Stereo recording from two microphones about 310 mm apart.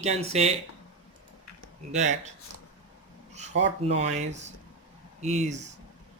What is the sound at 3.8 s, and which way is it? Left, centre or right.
Speech, right.